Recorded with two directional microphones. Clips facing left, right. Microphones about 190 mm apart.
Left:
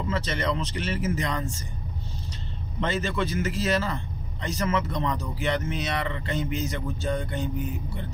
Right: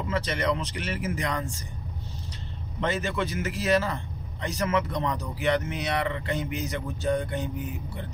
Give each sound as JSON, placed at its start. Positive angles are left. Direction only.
{"t": 0.1, "sound": "a man's voice", "side_deg": -10}
{"t": 2.8, "sound": "a man's voice", "side_deg": -15}